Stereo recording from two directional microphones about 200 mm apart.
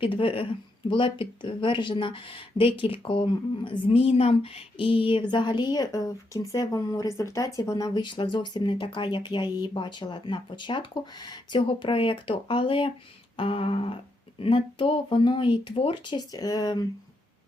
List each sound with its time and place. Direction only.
0.0 s speech: 25° left (ahead or behind)